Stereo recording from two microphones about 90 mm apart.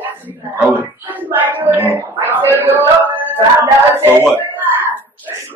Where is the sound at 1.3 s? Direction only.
20° right (ahead or behind).